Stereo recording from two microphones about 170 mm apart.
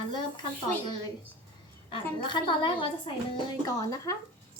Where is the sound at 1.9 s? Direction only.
30° left (ahead or behind).